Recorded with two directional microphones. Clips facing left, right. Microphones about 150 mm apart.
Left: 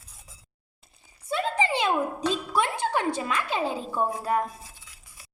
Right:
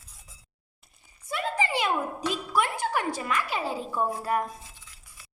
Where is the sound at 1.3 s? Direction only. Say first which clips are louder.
Left 3 dB; 25° left (ahead or behind).